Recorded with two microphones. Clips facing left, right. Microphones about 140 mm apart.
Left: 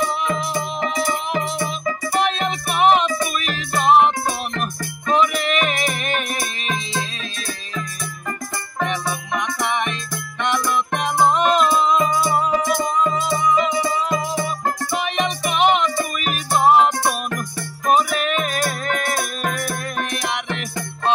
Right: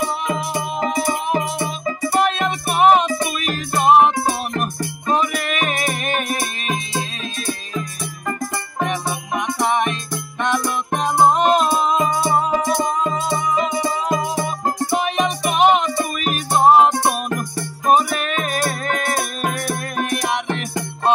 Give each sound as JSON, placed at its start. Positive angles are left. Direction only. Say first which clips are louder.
{"t": 0.7, "sound": "music", "louder": "right 4 dB", "side_deg": -40}
{"t": 8.8, "sound": "music", "louder": "even", "side_deg": -40}